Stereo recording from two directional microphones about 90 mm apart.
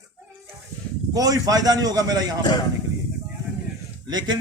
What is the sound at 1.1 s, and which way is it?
Speech, 45° right (ahead or behind).